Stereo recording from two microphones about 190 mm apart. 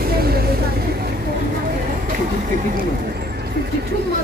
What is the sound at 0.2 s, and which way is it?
Vehicle, 55° right (ahead or behind).